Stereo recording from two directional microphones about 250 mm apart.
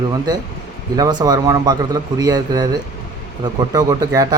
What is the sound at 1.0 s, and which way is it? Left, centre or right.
Speech, centre.